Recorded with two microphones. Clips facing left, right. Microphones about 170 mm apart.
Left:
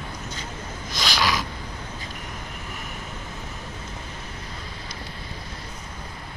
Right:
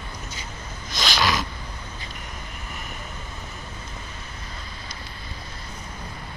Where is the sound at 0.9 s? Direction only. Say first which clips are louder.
Right 1 dB; 10° left (ahead or behind).